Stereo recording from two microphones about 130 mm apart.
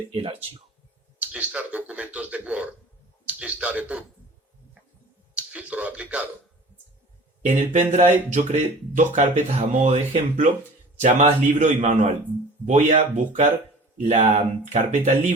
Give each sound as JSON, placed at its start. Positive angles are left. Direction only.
{"t": 0.1, "sound": "speech", "side_deg": -45}
{"t": 1.2, "sound": "speech", "side_deg": -10}
{"t": 5.4, "sound": "speech", "side_deg": -10}
{"t": 7.4, "sound": "speech", "side_deg": -70}